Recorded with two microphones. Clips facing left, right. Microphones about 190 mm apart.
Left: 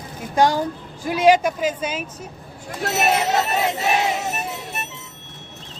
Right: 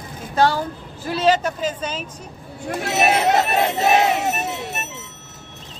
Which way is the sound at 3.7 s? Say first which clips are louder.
Right 4 dB; 65° right (ahead or behind).